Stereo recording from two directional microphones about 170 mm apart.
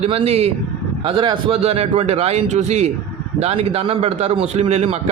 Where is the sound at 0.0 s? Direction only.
35° right (ahead or behind).